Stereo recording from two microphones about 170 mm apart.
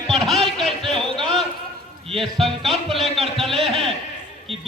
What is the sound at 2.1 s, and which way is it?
Speech, 30° right (ahead or behind).